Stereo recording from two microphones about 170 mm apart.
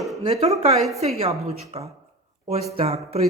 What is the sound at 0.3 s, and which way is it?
Speech, 35° right (ahead or behind).